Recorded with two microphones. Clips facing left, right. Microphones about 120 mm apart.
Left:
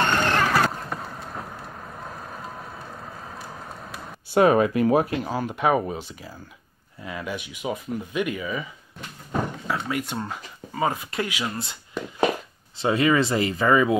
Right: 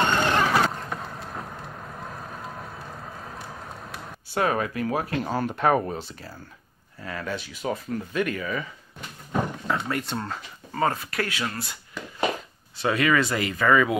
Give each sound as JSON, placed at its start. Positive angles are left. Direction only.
{"t": 0.0, "sound": "vehicle", "side_deg": -10}
{"t": 4.3, "sound": "speech", "side_deg": 20}
{"t": 5.2, "sound": "speech", "side_deg": 5}
{"t": 9.7, "sound": "speech", "side_deg": 10}